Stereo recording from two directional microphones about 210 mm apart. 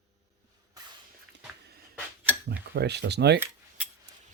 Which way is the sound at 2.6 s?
50° right (ahead or behind).